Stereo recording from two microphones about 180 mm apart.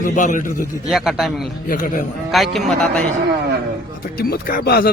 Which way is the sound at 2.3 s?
Centre (ahead or behind).